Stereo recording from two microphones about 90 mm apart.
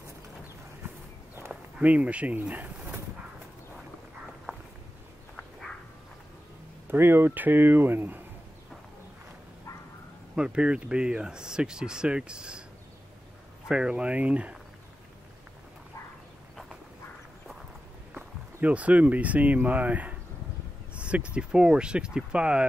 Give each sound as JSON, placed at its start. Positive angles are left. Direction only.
{"t": 1.8, "sound": "speech", "side_deg": -15}
{"t": 6.9, "sound": "speech", "side_deg": -25}
{"t": 10.3, "sound": "speech", "side_deg": -10}
{"t": 13.7, "sound": "speech", "side_deg": -10}
{"t": 18.1, "sound": "speech", "side_deg": -15}
{"t": 20.9, "sound": "a sound", "side_deg": -15}
{"t": 21.4, "sound": "speech", "side_deg": -10}